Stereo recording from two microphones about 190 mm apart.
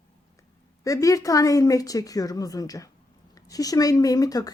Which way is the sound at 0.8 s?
15° left (ahead or behind).